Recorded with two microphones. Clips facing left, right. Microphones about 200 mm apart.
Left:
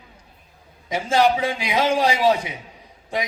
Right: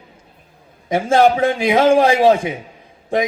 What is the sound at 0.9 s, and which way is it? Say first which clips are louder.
A man's voice: right 5 dB; 50° right (ahead or behind).